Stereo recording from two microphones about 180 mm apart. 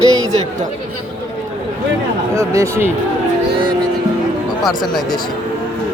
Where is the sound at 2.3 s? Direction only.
15° right (ahead or behind).